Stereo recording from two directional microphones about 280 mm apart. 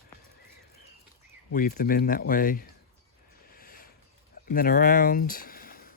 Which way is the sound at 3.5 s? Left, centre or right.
Left.